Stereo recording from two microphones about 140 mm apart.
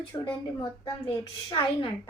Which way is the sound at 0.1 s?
25° left (ahead or behind).